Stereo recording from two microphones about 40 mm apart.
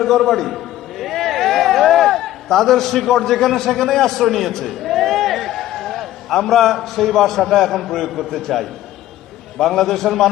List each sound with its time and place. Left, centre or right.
0.0 s a man's voice: centre